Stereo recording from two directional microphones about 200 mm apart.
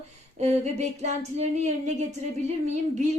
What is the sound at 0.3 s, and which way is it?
A woman's voice, 35° right (ahead or behind).